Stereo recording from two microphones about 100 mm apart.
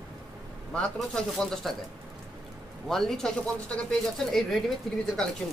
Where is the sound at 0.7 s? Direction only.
10° left (ahead or behind).